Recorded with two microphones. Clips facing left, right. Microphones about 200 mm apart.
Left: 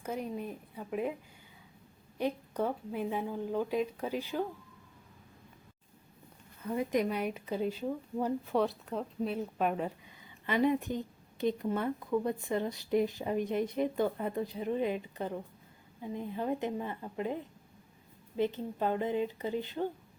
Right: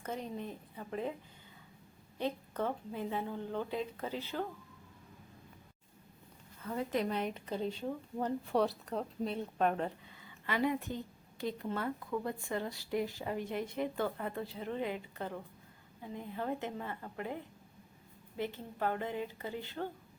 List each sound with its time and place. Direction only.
0.0 s a woman's voice: 10° left (ahead or behind)
2.1 s a woman's voice: 10° left (ahead or behind)
6.7 s a woman's voice: 15° left (ahead or behind)
10.2 s a woman's voice: 20° left (ahead or behind)
18.3 s a woman's voice: 20° left (ahead or behind)